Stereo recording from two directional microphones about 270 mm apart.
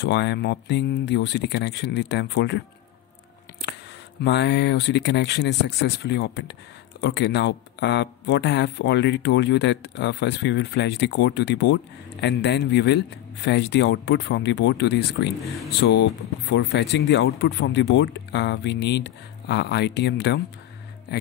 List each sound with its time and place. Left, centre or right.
0.0 s speech: left
4.2 s speech: left